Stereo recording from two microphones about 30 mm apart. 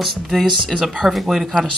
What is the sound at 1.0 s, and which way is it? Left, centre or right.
Speech, centre.